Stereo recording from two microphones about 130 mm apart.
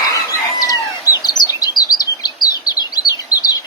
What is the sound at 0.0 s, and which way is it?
Chicken, 25° left (ahead or behind).